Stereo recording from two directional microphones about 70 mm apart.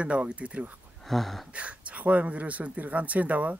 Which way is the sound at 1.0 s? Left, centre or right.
Centre.